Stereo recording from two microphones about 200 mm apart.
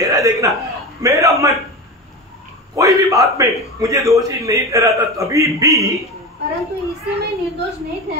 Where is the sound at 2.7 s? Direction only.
15° right (ahead or behind).